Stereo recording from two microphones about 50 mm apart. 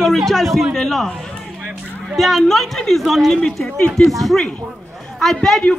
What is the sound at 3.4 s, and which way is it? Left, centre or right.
Speech, centre.